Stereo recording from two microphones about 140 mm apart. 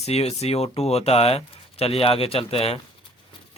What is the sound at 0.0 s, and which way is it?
Speech, 50° left (ahead or behind).